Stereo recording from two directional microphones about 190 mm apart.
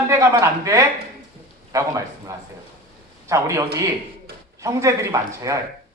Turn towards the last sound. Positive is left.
turn(degrees=-15)  # may be behind; listen again after turning